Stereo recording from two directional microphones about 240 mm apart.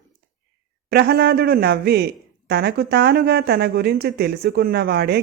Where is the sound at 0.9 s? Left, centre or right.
Right.